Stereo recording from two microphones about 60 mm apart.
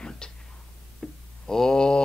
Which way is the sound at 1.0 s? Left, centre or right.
Centre.